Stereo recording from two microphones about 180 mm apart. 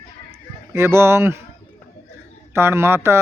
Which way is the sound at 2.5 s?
15° right (ahead or behind).